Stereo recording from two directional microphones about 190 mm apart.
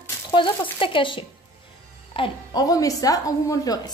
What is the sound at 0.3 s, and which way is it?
A woman's voice, 25° left (ahead or behind).